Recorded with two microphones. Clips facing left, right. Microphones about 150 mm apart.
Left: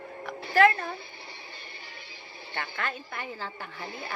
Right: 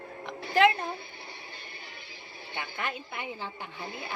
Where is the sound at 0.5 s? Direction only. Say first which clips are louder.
Left 1 dB; 20° right (ahead or behind).